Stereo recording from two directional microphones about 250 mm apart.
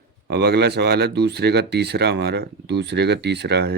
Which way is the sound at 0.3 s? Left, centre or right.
Right.